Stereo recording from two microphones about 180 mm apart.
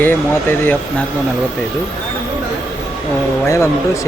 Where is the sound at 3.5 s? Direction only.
15° left (ahead or behind).